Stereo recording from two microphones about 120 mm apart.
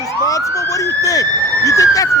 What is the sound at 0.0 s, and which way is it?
Speech, 30° left (ahead or behind).